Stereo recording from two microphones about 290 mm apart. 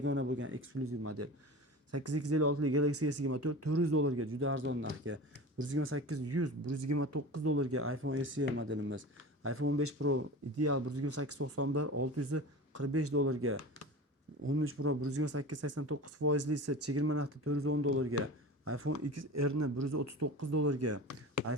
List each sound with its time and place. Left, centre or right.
0.0 s speech: right